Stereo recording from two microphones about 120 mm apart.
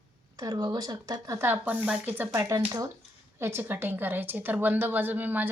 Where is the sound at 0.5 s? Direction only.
35° right (ahead or behind); by 2.3 s 15° right (ahead or behind).